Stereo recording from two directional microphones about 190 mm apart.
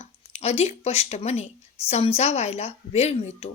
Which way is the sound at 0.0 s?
35° left (ahead or behind).